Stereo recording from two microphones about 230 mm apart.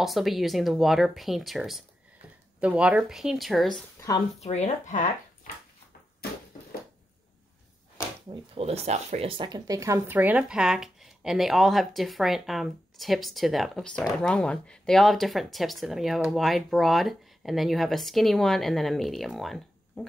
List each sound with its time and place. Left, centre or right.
0.0 s speech: centre
4.4 s speech: left
8.5 s speech: right; by 20.1 s centre